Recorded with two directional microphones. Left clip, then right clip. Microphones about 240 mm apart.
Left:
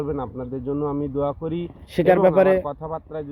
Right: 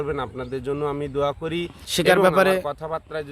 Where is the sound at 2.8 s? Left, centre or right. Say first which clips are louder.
Right 2 dB; right.